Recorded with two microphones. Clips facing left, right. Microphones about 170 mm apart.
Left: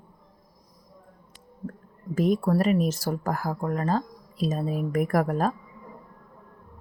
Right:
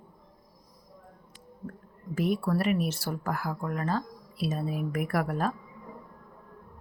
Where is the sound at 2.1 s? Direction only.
40° left (ahead or behind).